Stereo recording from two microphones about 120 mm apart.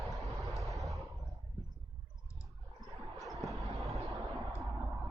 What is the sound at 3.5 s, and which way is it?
Vehicle, 25° right (ahead or behind).